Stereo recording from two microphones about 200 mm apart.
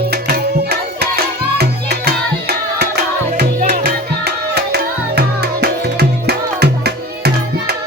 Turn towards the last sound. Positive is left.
turn(degrees=-55)  # may be behind; listen again after turning